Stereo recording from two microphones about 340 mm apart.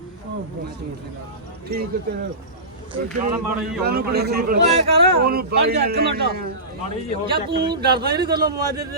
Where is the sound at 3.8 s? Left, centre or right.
Right.